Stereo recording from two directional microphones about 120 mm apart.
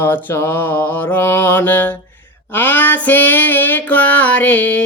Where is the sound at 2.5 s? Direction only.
15° left (ahead or behind).